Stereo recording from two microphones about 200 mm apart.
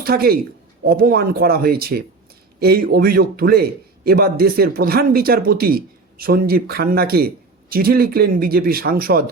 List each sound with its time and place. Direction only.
0.0 s a man's voice: 50° right (ahead or behind)